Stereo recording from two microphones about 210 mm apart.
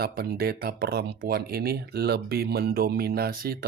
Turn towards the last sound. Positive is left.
turn(degrees=-45)  # may be behind; listen again after turning